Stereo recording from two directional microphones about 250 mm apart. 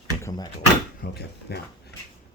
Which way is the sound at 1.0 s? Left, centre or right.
Left.